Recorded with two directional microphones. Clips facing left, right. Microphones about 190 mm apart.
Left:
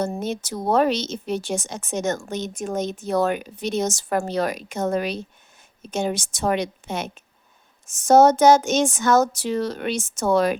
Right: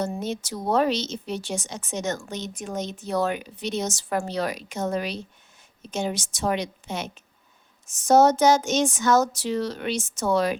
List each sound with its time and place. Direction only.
0.0 s speech: 50° left (ahead or behind)